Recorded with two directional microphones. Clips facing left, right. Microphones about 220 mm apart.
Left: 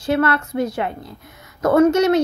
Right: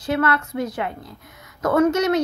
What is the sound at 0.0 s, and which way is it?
Speech, 30° left (ahead or behind).